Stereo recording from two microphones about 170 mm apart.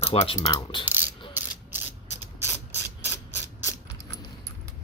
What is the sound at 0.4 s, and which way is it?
Mechanisms, 25° left (ahead or behind).